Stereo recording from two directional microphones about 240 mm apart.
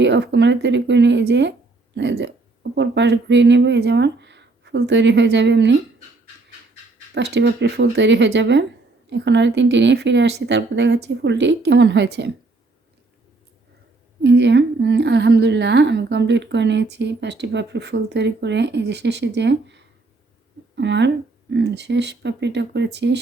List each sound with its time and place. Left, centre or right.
0.0 s a woman's voice: right
7.1 s a woman's voice: right
14.2 s a woman's voice: right